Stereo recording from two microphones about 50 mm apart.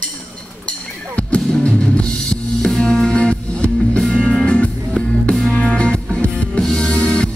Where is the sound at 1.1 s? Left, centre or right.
Left.